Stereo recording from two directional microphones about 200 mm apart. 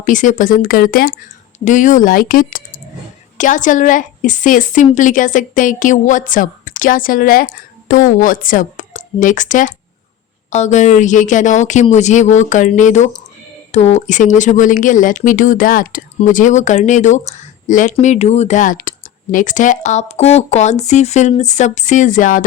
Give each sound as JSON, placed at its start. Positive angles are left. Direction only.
{"t": 0.0, "sound": "a woman's voice", "side_deg": 40}